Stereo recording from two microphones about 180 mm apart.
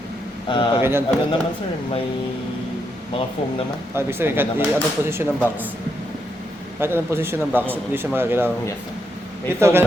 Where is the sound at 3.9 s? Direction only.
10° right (ahead or behind).